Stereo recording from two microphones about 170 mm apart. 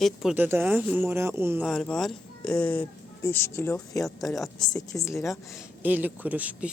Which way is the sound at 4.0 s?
Centre (ahead or behind).